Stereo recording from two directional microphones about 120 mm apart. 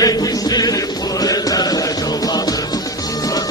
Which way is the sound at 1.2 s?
30° left (ahead or behind).